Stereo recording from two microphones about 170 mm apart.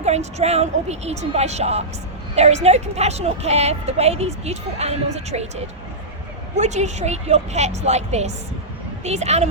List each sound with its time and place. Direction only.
0.0 s a woman's voice: 40° right (ahead or behind)